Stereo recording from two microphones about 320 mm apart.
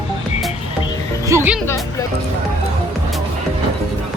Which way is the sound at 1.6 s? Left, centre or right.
Centre.